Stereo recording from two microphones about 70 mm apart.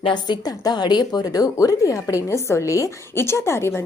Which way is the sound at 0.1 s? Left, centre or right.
Left.